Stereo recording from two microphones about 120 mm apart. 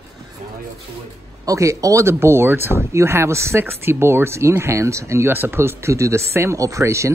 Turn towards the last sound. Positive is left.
turn(degrees=-25)  # may be behind; listen again after turning